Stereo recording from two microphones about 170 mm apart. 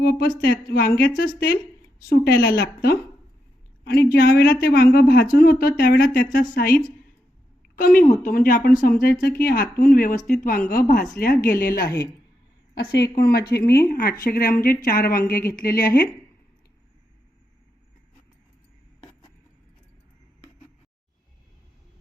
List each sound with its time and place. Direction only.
0.0 s a woman's voice: 65° left (ahead or behind)
4.1 s a woman's voice: 65° left (ahead or behind)
12.7 s a woman's voice: 70° left (ahead or behind)